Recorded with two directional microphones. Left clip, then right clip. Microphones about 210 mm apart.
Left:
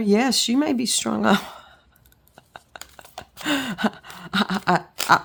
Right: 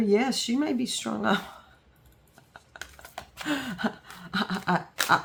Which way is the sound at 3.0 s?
15° left (ahead or behind).